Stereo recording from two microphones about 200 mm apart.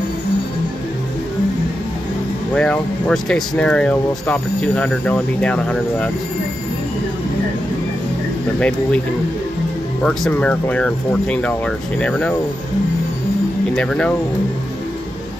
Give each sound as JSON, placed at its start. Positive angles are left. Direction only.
{"t": 2.5, "sound": "speech", "side_deg": 5}
{"t": 8.5, "sound": "speech", "side_deg": 5}
{"t": 10.0, "sound": "speech", "side_deg": 5}
{"t": 13.7, "sound": "speech", "side_deg": 5}